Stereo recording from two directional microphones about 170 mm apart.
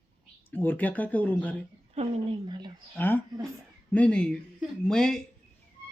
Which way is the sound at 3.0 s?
10° left (ahead or behind).